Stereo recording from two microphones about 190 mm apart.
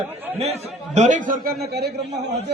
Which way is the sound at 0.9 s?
40° right (ahead or behind).